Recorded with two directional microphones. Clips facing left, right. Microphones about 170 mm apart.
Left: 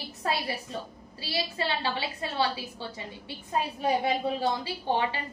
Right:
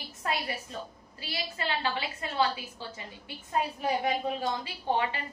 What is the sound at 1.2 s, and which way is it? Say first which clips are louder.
A woman's voice: left 4 dB; 30° left (ahead or behind).